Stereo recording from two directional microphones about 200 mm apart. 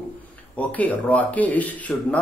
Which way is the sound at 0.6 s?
5° left (ahead or behind).